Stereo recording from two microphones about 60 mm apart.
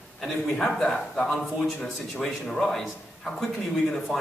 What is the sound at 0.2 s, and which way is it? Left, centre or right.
Speech, centre.